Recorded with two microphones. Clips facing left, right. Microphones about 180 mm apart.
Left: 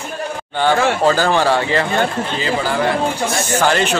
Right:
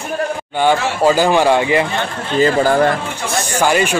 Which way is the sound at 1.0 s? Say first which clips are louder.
Right 2 dB; 10° right (ahead or behind).